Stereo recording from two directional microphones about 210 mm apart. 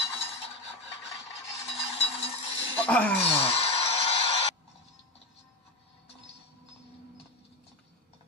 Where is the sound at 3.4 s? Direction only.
30° left (ahead or behind).